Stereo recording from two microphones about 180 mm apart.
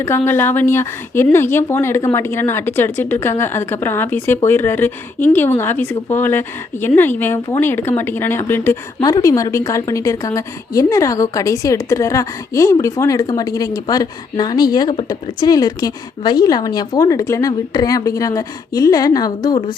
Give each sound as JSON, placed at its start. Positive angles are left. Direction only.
{"t": 0.3, "sound": "a woman's voice", "side_deg": 10}